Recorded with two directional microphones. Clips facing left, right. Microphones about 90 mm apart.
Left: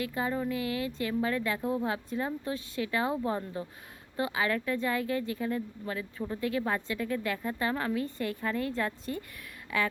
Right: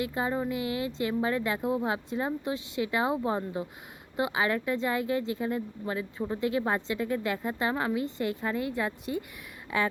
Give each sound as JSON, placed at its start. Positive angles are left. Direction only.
{"t": 0.0, "sound": "speech", "side_deg": -25}